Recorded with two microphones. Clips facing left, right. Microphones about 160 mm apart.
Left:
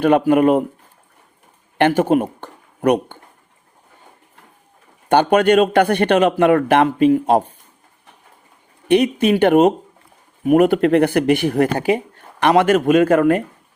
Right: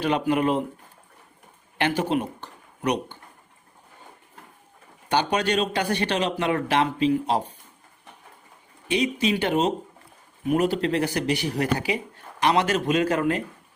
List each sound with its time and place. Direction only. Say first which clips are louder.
0.0 s speech: left 9 dB; 50° left (ahead or behind)
1.8 s speech: left 9 dB; 50° left (ahead or behind)
5.0 s speech: left 10 dB; 55° left (ahead or behind)
8.9 s speech: left 9 dB; 55° left (ahead or behind)